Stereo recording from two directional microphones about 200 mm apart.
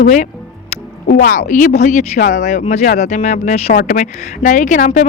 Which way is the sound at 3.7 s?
45° left (ahead or behind).